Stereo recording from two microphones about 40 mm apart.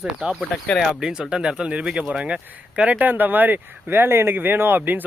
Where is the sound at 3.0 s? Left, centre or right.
Right.